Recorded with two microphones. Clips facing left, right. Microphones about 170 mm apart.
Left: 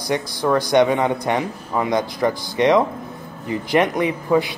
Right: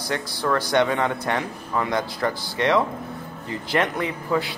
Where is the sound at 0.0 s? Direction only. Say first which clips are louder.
Left 5 dB; 15° left (ahead or behind).